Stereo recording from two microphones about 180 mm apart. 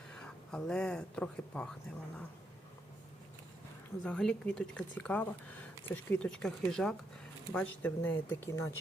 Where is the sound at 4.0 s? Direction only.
5° left (ahead or behind).